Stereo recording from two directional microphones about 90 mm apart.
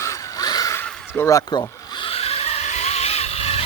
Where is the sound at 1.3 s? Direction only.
40° left (ahead or behind).